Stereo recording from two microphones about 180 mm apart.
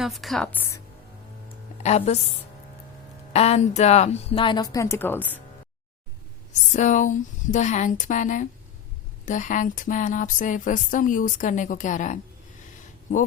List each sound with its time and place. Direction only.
0.0 s a woman's voice: centre (ahead or behind)
1.8 s a woman's voice: 35° left (ahead or behind)
3.3 s a woman's voice: 35° left (ahead or behind); by 5.4 s 10° left (ahead or behind)
6.5 s speech: 40° left (ahead or behind)